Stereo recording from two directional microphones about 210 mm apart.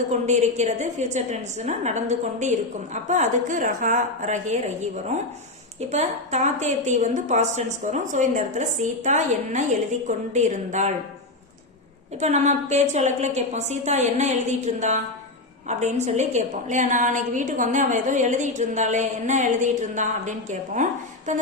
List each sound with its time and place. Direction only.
0.1 s a woman's voice: 35° right (ahead or behind)
5.9 s a woman's voice: 30° right (ahead or behind)
12.2 s a woman's voice: 35° right (ahead or behind)